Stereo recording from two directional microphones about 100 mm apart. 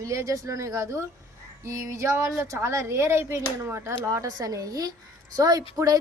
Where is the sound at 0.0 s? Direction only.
30° right (ahead or behind).